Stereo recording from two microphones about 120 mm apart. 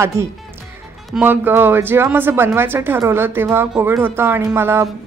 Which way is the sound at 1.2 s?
15° right (ahead or behind).